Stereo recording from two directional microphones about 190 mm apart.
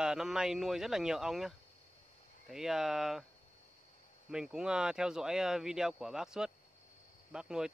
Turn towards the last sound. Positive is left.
turn(degrees=-5)  # may be behind; listen again after turning